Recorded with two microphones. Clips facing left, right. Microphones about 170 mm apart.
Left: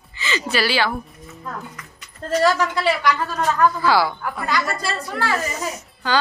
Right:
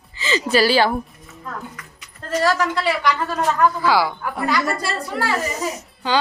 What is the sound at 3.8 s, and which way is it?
A woman's voice, 15° right (ahead or behind).